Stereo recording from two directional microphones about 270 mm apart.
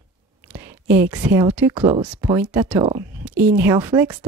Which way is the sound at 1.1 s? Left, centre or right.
Centre.